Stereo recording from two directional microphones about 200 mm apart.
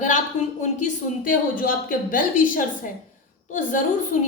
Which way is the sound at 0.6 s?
40° left (ahead or behind).